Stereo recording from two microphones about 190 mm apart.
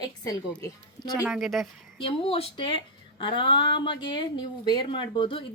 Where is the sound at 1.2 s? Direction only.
Centre (ahead or behind).